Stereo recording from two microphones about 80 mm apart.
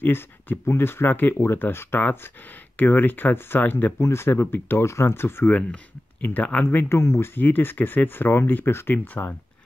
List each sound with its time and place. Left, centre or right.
0.0 s speech: left